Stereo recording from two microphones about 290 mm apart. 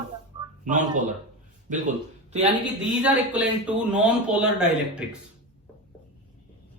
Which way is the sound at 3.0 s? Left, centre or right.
Centre.